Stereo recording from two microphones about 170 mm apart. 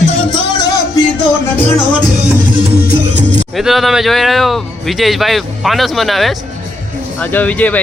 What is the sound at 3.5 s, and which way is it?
Speech, centre (ahead or behind).